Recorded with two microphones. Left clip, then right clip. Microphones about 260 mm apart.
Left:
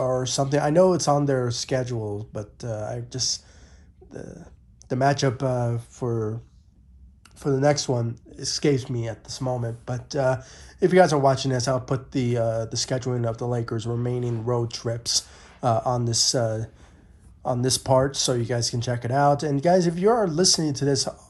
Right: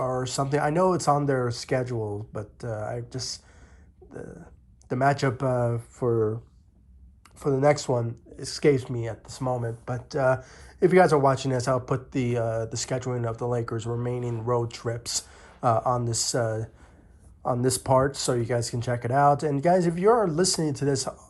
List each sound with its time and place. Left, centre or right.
0.2 s speech: centre
6.1 s speech: left
7.3 s speech: centre
17.5 s speech: centre